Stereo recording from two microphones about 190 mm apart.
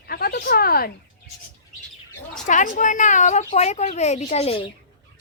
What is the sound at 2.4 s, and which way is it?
Speech, 40° left (ahead or behind).